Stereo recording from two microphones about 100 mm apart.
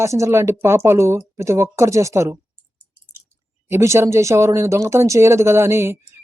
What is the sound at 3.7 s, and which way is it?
Speech, 30° right (ahead or behind).